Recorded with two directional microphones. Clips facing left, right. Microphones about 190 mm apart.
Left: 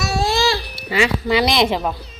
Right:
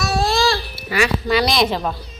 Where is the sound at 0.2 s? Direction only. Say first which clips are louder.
Even; 20° left (ahead or behind).